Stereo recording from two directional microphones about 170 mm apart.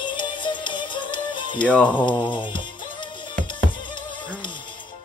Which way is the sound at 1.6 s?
10° left (ahead or behind).